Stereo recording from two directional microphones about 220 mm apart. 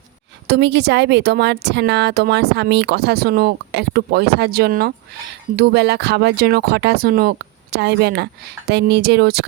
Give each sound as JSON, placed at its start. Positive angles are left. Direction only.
{"t": 0.4, "sound": "speech", "side_deg": -50}